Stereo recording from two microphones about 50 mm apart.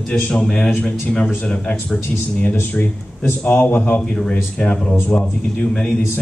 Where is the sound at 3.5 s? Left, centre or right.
Left.